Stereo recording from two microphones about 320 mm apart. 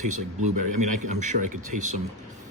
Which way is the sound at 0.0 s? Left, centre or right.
Right.